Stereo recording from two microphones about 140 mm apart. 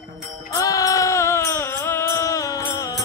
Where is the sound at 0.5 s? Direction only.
25° left (ahead or behind).